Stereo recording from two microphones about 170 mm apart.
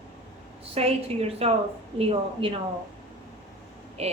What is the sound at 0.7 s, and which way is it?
Speech, 35° right (ahead or behind).